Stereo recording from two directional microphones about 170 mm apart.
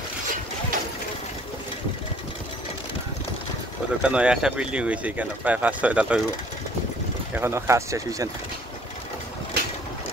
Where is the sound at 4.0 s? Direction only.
5° right (ahead or behind).